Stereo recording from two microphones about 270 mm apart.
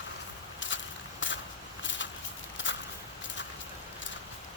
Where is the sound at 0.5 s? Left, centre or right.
Left.